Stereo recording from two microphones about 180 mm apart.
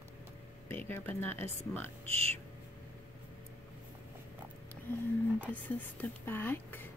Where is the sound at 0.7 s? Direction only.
10° left (ahead or behind).